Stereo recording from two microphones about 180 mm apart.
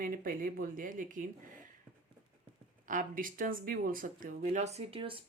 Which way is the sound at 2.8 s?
50° right (ahead or behind).